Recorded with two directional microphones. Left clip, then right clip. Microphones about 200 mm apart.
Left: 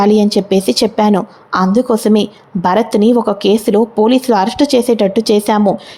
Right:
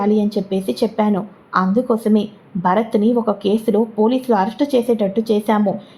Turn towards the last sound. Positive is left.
turn(degrees=30)  # may be behind; listen again after turning